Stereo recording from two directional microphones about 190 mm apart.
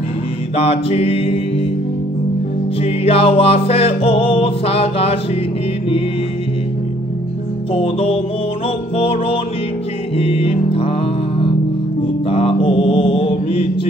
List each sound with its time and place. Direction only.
0.6 s music: 30° left (ahead or behind)
2.8 s music: 30° left (ahead or behind)
7.7 s music: 30° left (ahead or behind)
12.3 s mantra: 30° left (ahead or behind)